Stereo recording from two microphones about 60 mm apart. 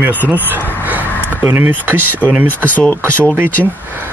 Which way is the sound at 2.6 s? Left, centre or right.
Left.